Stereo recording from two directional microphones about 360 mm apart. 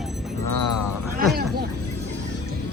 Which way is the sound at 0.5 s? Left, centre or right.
Left.